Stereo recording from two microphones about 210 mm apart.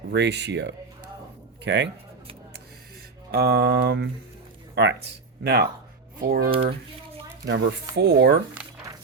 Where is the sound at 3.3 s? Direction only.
50° right (ahead or behind).